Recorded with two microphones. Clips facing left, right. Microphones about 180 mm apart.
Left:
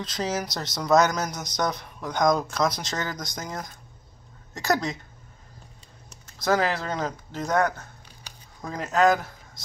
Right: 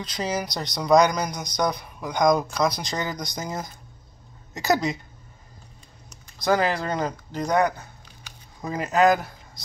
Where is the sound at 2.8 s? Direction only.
15° right (ahead or behind).